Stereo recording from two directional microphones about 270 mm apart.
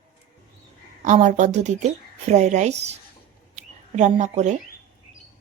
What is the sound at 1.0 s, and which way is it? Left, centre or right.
Speech, right.